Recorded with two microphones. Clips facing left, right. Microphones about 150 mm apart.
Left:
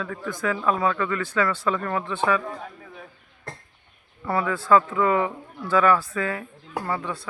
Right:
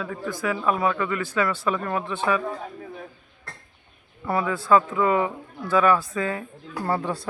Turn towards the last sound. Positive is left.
turn(degrees=-35)  # may be behind; listen again after turning